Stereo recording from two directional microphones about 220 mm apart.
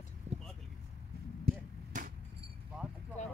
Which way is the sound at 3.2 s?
35° left (ahead or behind).